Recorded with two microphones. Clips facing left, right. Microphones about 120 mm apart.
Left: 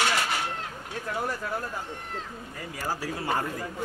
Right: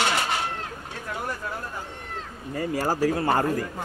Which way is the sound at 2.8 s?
45° right (ahead or behind).